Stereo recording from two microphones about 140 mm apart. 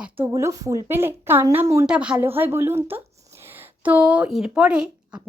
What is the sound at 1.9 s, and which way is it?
A woman's voice, 10° right (ahead or behind).